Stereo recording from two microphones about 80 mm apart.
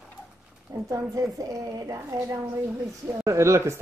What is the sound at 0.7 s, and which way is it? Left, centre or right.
Speech, right.